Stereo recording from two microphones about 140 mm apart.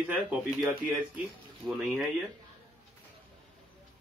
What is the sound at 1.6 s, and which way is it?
Speech, centre (ahead or behind).